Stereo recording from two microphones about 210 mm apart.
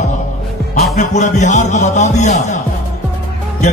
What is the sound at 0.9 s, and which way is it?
Speech, 35° left (ahead or behind).